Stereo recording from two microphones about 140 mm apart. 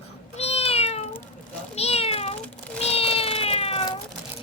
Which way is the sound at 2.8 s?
45° left (ahead or behind).